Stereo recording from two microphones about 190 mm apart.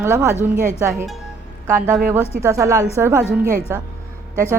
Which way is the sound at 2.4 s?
15° right (ahead or behind).